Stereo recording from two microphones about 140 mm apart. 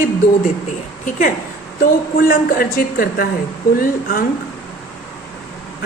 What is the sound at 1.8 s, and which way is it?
A woman's voice, 90° left.